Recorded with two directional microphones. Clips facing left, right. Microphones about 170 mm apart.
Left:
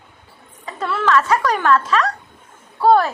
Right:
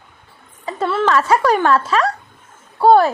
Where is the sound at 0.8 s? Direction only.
30° right (ahead or behind).